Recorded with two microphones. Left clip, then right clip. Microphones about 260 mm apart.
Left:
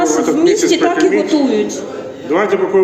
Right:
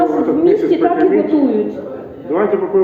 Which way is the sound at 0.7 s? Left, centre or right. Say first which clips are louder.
Even; left.